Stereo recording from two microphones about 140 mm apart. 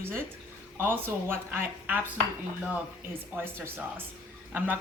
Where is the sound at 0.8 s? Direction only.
15° right (ahead or behind).